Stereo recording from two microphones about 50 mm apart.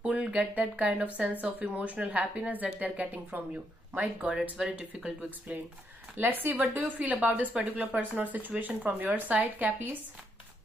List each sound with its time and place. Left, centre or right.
0.1 s speech: right
4.4 s speech: centre
6.1 s speech: right
6.8 s speech: right